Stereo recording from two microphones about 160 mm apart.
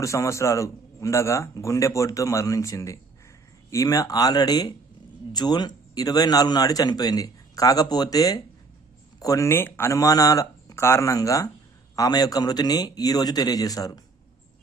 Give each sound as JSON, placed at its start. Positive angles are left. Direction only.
{"t": 0.0, "sound": "a man's voice", "side_deg": 20}